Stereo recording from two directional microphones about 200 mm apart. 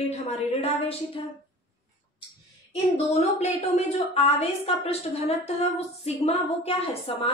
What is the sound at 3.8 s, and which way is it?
A woman's voice, 30° left (ahead or behind).